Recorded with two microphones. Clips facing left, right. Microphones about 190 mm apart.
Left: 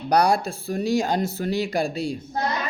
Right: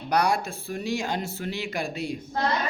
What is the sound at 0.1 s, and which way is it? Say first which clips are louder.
Speech: left 4 dB; 35° left (ahead or behind).